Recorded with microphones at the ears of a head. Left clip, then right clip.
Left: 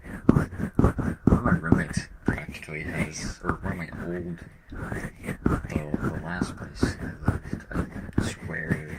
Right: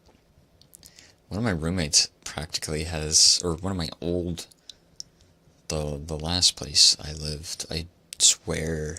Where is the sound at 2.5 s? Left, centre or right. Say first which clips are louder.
Right 3 dB; right.